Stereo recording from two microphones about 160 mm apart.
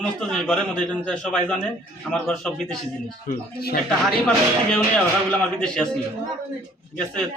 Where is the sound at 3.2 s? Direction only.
70° left (ahead or behind).